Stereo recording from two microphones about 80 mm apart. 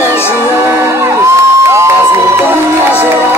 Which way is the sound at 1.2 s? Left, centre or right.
Right.